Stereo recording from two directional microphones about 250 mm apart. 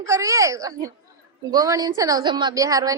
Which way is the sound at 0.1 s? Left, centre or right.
Centre.